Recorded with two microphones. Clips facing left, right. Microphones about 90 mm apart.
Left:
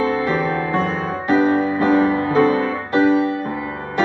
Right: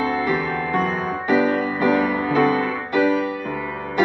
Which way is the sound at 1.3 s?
30° left (ahead or behind).